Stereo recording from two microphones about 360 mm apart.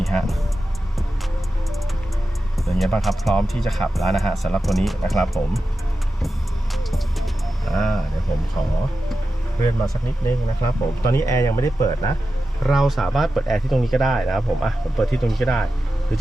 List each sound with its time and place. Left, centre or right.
0.0 s music: centre
2.6 s speech: centre
6.7 s music: centre
9.8 s speech: centre